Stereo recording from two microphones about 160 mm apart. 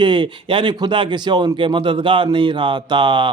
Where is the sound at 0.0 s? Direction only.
30° right (ahead or behind).